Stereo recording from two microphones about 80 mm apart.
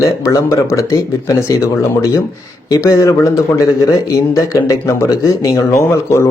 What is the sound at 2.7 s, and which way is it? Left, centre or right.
Speech, left.